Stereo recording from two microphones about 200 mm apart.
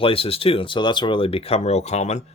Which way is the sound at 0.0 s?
30° left (ahead or behind).